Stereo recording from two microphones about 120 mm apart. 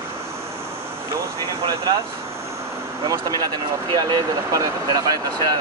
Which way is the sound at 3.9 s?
35° right (ahead or behind).